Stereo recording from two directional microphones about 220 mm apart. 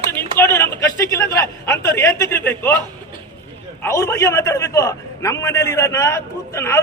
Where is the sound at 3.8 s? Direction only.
15° left (ahead or behind).